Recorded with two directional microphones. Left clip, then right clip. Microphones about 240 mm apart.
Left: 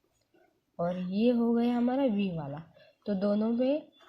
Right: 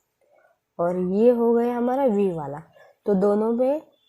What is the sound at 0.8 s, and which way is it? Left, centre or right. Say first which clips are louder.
Speech: right 10 dB; right.